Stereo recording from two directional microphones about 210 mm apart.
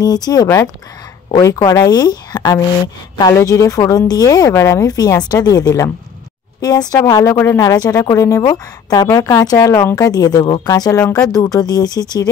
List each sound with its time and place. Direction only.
0.0 s speech: 20° left (ahead or behind)